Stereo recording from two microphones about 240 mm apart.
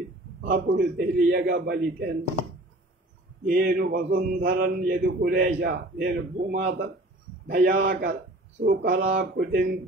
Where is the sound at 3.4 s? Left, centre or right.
Right.